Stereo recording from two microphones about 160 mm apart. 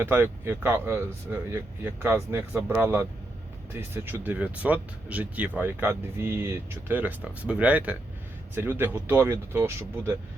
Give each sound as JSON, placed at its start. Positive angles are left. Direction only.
{"t": 0.0, "sound": "speech", "side_deg": -15}